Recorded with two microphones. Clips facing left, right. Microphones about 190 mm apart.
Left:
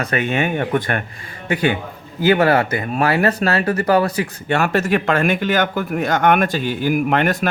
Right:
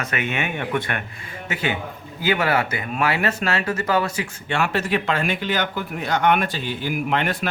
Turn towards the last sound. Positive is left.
turn(degrees=45)  # may be behind; listen again after turning